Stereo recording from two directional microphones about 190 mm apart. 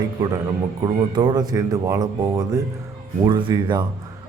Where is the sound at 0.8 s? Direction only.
20° right (ahead or behind).